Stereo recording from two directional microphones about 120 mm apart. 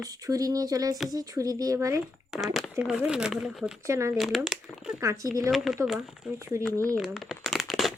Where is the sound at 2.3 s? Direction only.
5° right (ahead or behind).